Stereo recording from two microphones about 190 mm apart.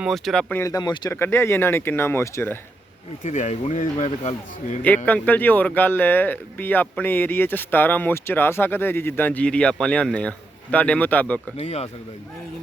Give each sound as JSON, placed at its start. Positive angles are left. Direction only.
{"t": 0.0, "sound": "speech", "side_deg": 0}
{"t": 0.6, "sound": "speech", "side_deg": 20}
{"t": 3.2, "sound": "speech", "side_deg": 35}
{"t": 5.0, "sound": "speech", "side_deg": 10}
{"t": 11.5, "sound": "speech", "side_deg": 35}